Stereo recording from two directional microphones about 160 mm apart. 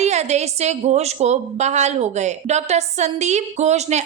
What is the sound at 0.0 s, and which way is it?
A woman's voice, 45° right (ahead or behind).